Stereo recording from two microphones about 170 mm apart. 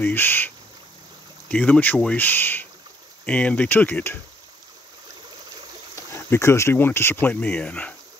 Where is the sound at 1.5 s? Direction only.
5° left (ahead or behind).